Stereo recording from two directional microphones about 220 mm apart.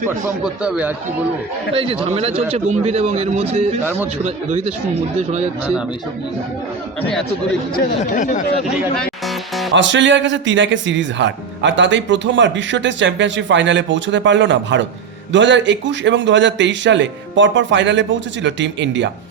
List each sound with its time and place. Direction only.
0.1 s speech: 5° right (ahead or behind)
1.7 s a man's voice: 25° right (ahead or behind)
3.8 s a man's voice: 10° right (ahead or behind)
4.2 s a man's voice: 30° right (ahead or behind)
9.0 s music: centre (ahead or behind)
9.7 s speech: 55° right (ahead or behind)